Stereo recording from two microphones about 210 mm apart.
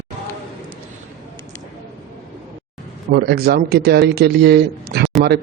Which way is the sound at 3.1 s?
50° right (ahead or behind).